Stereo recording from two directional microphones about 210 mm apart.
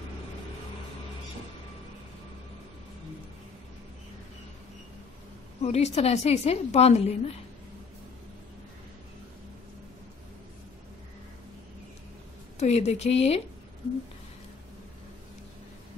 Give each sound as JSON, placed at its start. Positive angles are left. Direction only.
{"t": 5.6, "sound": "a woman's voice", "side_deg": 30}
{"t": 12.5, "sound": "a woman's voice", "side_deg": 30}